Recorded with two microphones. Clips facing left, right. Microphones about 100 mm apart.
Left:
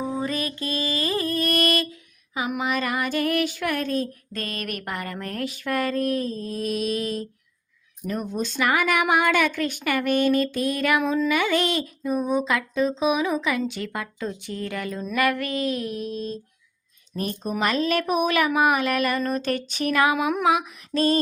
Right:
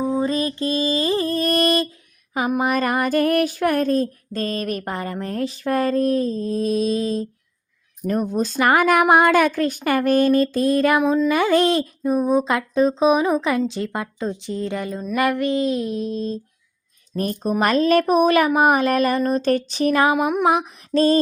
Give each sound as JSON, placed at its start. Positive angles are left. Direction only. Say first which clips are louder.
{"t": 0.2, "sound": "mantra", "louder": "right 6 dB", "side_deg": -30}
{"t": 2.5, "sound": "speech", "louder": "right 6 dB", "side_deg": -45}
{"t": 4.3, "sound": "a sound", "louder": "right 7 dB", "side_deg": -30}
{"t": 8.0, "sound": "speech", "louder": "right 6 dB", "side_deg": -45}
{"t": 14.4, "sound": "a sound", "louder": "right 5 dB", "side_deg": -25}
{"t": 17.2, "sound": "speech", "louder": "right 5 dB", "side_deg": -40}